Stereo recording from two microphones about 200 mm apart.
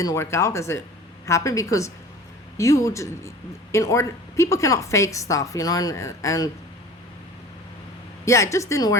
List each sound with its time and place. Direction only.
0.0 s a man's voice: 15° left (ahead or behind)
8.2 s a man's voice: 15° left (ahead or behind)